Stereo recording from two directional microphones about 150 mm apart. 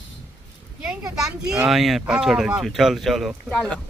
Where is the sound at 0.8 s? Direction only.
5° right (ahead or behind).